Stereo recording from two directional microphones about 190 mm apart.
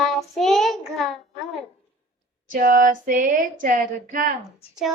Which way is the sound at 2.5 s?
45° right (ahead or behind).